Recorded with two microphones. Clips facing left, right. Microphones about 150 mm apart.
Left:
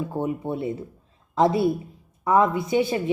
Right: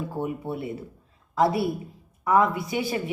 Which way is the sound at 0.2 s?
25° left (ahead or behind).